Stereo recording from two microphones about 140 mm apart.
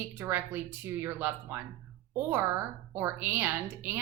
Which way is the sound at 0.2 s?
15° right (ahead or behind).